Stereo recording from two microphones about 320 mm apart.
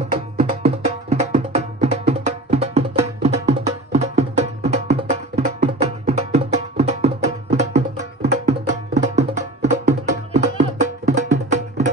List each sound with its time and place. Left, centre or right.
0.4 s music: centre